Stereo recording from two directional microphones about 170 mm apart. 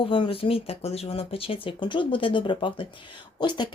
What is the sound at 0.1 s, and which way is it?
Speech, 30° left (ahead or behind).